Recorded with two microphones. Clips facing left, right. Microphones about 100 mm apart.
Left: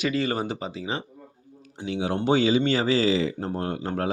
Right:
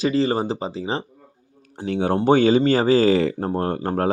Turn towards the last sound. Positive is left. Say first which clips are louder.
# right 6 dB
turn(degrees=-40)  # may be behind; listen again after turning